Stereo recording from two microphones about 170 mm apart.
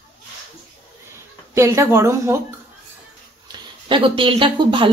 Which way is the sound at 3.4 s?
25° right (ahead or behind).